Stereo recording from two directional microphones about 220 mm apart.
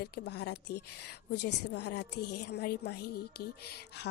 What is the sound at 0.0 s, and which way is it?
Speech, 50° left (ahead or behind).